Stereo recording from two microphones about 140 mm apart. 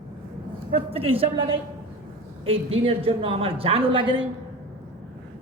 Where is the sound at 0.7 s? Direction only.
40° right (ahead or behind).